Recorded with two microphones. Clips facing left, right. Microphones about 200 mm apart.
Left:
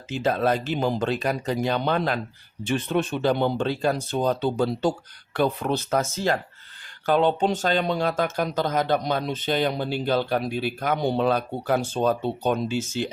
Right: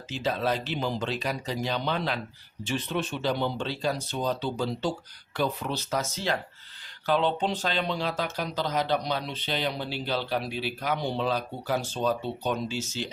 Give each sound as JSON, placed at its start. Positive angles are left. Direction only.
{"t": 0.1, "sound": "speech", "side_deg": 50}